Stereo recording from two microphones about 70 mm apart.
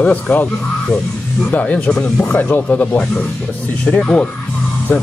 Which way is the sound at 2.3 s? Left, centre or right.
Left.